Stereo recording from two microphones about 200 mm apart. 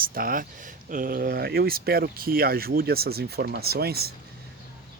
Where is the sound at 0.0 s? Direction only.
45° right (ahead or behind).